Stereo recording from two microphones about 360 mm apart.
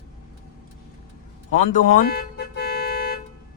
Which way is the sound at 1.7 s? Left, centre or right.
Left.